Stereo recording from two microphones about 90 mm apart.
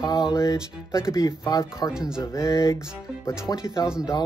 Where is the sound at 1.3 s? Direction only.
50° left (ahead or behind).